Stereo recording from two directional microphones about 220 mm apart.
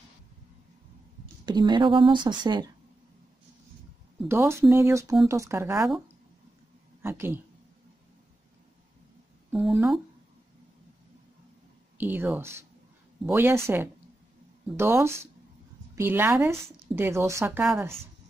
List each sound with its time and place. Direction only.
1.4 s speech: 20° right (ahead or behind)
4.3 s a woman's voice: 10° right (ahead or behind)
7.0 s a woman's voice: 10° right (ahead or behind)
9.5 s speech: centre (ahead or behind)
12.0 s a woman's voice: 10° right (ahead or behind)